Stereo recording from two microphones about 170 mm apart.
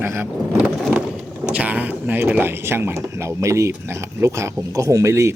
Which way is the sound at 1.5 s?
10° right (ahead or behind).